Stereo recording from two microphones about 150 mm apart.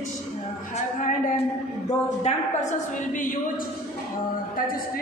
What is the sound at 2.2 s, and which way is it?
A woman's voice, 55° left (ahead or behind).